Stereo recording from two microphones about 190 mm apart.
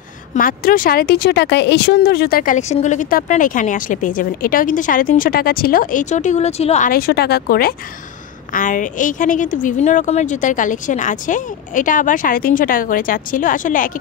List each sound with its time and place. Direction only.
0.3 s speech: 45° left (ahead or behind)
6.9 s speech: 55° left (ahead or behind)